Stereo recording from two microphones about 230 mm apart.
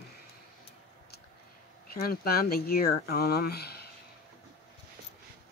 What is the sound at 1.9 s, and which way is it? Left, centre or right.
Speech, left.